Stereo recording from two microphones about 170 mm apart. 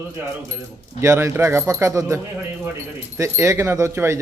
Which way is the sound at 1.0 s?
15° right (ahead or behind).